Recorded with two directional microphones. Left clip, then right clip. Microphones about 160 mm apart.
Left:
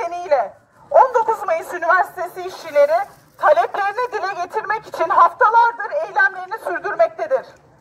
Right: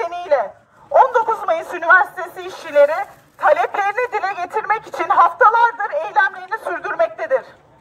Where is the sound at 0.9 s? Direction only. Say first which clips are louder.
Even; 10° left (ahead or behind).